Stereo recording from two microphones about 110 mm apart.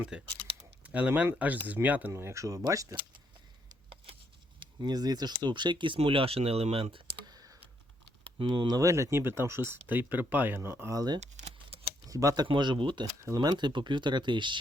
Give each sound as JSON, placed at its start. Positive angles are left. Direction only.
{"t": 0.0, "sound": "speech", "side_deg": -10}
{"t": 0.3, "sound": "typing", "side_deg": -45}
{"t": 0.9, "sound": "speech", "side_deg": -15}
{"t": 4.8, "sound": "speech", "side_deg": -40}
{"t": 8.4, "sound": "speech", "side_deg": -40}
{"t": 11.2, "sound": "a sound", "side_deg": -90}
{"t": 12.0, "sound": "speech", "side_deg": -30}
{"t": 12.5, "sound": "speech", "side_deg": -45}
{"t": 13.2, "sound": "speech", "side_deg": -35}